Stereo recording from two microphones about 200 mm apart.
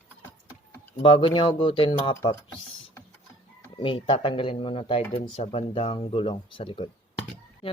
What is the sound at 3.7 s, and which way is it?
A man's voice, 25° left (ahead or behind).